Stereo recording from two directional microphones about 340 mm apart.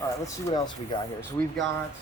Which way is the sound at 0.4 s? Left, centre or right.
Centre.